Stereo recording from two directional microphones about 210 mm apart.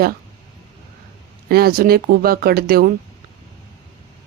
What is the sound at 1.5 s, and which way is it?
Speech, 45° right (ahead or behind).